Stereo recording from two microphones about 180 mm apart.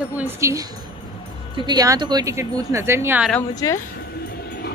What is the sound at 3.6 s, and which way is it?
Speech, 20° left (ahead or behind).